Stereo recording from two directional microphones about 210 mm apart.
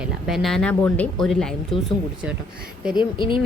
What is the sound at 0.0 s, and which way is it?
Speech, centre (ahead or behind).